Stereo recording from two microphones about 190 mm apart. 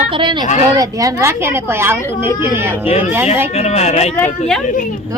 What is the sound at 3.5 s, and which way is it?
Speech, 35° left (ahead or behind).